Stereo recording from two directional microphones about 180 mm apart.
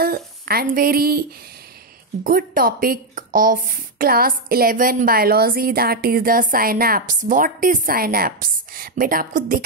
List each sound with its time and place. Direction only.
0.0 s a woman's voice: 55° right (ahead or behind)
2.2 s speech: 55° right (ahead or behind)